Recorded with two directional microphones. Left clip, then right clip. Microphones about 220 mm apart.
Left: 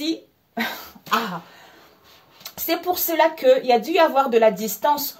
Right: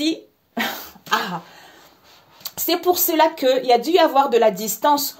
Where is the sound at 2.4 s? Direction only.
35° right (ahead or behind).